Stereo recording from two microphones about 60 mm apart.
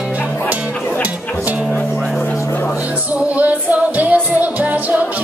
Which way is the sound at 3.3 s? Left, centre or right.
Right.